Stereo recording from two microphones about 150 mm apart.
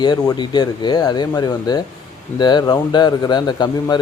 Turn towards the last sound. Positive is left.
turn(degrees=30)  # may be behind; listen again after turning